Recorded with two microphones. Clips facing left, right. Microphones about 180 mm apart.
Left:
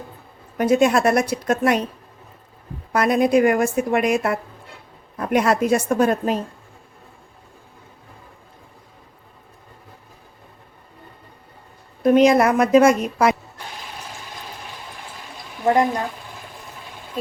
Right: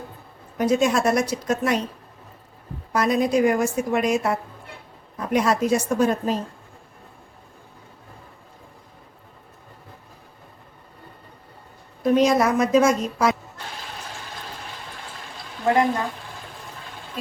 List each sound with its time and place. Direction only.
0.5 s a woman's voice: 60° left (ahead or behind)
2.9 s a woman's voice: 60° left (ahead or behind)
12.0 s a woman's voice: 60° left (ahead or behind)